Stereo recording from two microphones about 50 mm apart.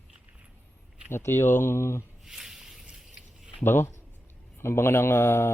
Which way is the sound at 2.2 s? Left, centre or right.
Centre.